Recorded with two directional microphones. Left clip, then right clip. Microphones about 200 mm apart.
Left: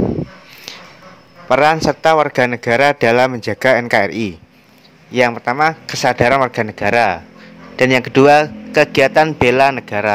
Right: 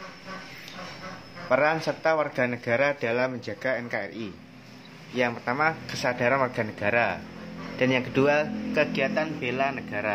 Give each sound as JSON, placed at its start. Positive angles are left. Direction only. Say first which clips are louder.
{"t": 1.5, "sound": "a man's voice", "louder": "left 11 dB", "side_deg": 50}